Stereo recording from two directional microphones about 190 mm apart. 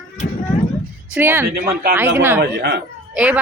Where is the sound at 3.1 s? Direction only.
5° right (ahead or behind).